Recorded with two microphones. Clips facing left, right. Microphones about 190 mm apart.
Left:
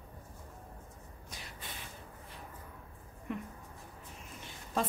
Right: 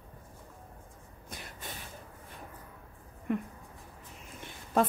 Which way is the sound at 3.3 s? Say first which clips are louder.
Right 7 dB; 55° right (ahead or behind).